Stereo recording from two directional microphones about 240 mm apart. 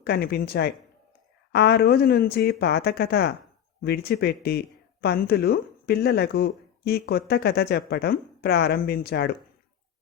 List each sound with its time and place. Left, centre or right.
0.0 s speech: left